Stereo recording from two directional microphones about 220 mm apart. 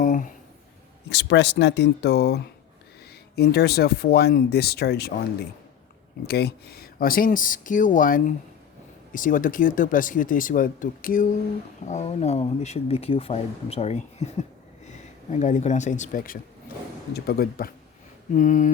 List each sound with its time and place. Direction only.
0.0 s a sound: 35° left (ahead or behind)
1.1 s speech: 55° left (ahead or behind)
6.2 s speech: 45° left (ahead or behind)